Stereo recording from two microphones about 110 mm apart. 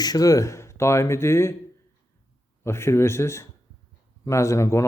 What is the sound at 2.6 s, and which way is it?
A man's voice, 25° left (ahead or behind).